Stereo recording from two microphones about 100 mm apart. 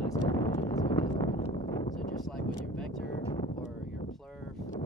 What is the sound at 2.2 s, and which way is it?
Speech, 5° left (ahead or behind).